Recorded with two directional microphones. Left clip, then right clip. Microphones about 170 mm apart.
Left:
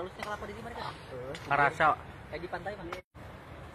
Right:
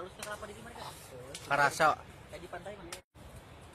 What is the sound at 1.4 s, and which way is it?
Speech, 55° right (ahead or behind).